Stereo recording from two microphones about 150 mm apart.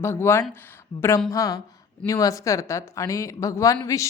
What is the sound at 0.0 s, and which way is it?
A woman's voice, 15° left (ahead or behind).